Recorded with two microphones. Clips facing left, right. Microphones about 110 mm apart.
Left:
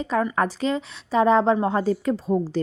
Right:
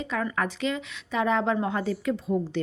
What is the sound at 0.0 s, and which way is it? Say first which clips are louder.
A woman's voice: left 6 dB; 35° left (ahead or behind).